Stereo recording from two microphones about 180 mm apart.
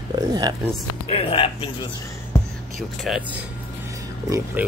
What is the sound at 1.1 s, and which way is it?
Speech, 30° left (ahead or behind).